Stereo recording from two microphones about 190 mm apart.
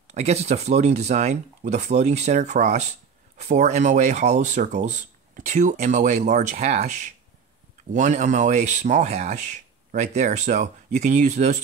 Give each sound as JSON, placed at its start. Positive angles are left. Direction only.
{"t": 0.1, "sound": "speech", "side_deg": -35}